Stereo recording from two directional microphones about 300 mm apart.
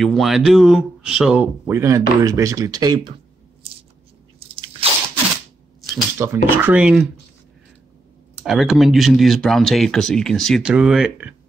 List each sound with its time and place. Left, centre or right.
0.0 s speech: centre
4.4 s crunch: centre
5.8 s speech: centre
8.5 s speech: centre